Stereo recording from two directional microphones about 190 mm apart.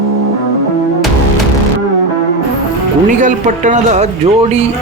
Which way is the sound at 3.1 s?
40° right (ahead or behind).